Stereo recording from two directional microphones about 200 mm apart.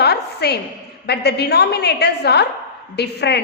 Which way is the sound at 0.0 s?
55° left (ahead or behind).